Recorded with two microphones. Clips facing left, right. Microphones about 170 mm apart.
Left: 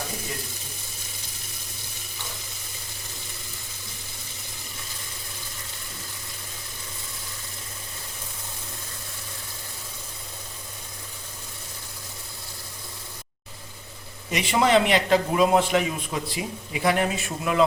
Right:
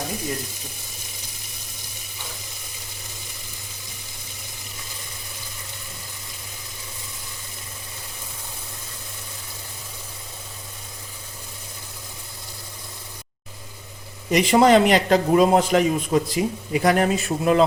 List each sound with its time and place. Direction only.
14.3 s a man's voice: 45° right (ahead or behind)